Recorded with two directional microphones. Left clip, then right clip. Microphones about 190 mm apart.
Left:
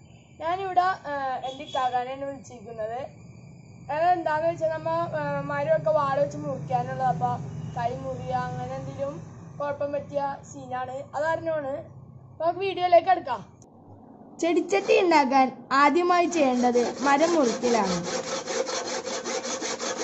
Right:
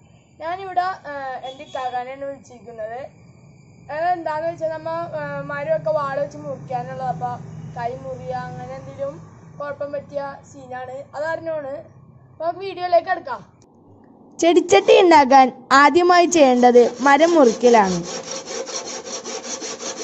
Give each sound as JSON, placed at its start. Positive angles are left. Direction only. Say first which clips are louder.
{"t": 0.4, "sound": "a woman's voice", "louder": "right 1 dB", "side_deg": -10}
{"t": 14.3, "sound": "a woman's voice", "louder": "right 10 dB", "side_deg": -40}